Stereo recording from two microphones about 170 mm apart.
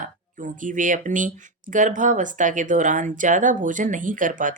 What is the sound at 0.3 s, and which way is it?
A woman's voice, 50° right (ahead or behind).